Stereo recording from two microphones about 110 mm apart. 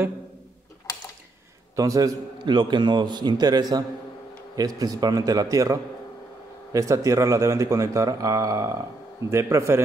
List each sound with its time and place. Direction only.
1.8 s speech: 35° right (ahead or behind)
2.3 s a man's voice: 45° right (ahead or behind); by 9.8 s 25° right (ahead or behind)